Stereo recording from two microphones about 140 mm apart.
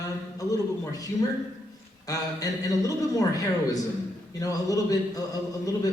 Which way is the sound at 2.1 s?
25° left (ahead or behind).